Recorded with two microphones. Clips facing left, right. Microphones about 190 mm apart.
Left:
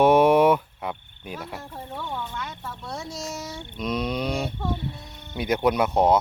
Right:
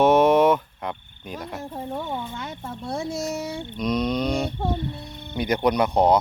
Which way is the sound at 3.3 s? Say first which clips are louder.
Right 6 dB; 55° right (ahead or behind).